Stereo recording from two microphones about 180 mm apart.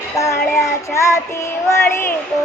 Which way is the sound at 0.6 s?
15° left (ahead or behind).